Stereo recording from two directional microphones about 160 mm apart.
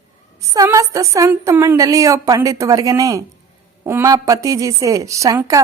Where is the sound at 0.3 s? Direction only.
20° right (ahead or behind).